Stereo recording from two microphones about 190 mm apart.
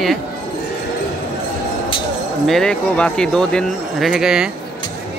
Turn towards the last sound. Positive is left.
turn(degrees=-5)  # may be behind; listen again after turning